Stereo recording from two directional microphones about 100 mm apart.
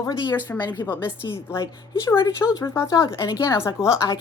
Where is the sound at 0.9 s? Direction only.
25° left (ahead or behind).